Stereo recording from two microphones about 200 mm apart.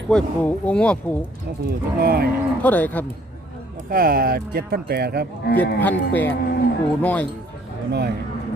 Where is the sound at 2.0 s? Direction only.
50° right (ahead or behind).